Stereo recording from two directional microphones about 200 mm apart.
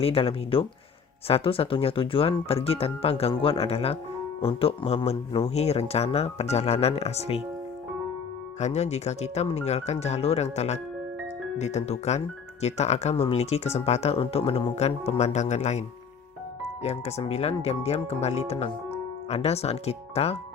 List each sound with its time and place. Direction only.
0.0 s speech: 30° left (ahead or behind)
8.6 s speech: 35° left (ahead or behind)
16.8 s speech: 35° left (ahead or behind)